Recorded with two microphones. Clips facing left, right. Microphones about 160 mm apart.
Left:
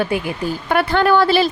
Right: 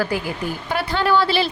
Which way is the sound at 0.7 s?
55° left (ahead or behind).